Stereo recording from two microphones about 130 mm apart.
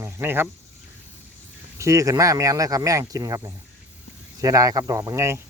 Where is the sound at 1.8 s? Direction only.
25° right (ahead or behind).